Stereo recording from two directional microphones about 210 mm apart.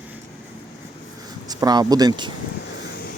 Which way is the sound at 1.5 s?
20° right (ahead or behind).